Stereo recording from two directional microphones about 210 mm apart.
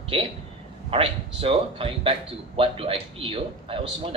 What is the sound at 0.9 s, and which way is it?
A man's voice, 25° right (ahead or behind).